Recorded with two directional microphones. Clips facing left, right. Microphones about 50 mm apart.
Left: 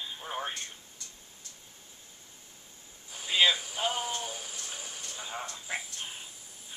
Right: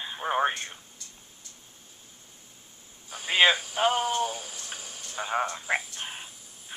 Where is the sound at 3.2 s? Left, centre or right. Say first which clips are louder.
Right 4 dB; right.